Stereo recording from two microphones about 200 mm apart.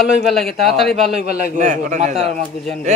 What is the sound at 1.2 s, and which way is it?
Speech, 50° left (ahead or behind).